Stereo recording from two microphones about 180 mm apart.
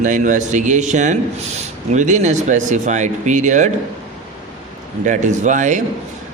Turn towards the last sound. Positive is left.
turn(degrees=-45)  # may be behind; listen again after turning